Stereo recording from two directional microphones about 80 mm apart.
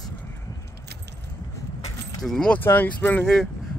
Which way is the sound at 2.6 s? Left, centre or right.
Left.